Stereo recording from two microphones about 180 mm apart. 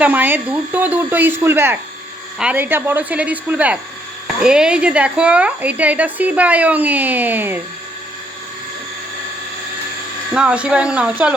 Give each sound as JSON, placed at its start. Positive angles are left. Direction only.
{"t": 0.0, "sound": "a woman's voice", "side_deg": -10}
{"t": 10.3, "sound": "speech", "side_deg": -5}